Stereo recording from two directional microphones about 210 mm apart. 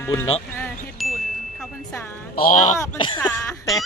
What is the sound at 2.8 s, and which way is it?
Speech, 20° left (ahead or behind).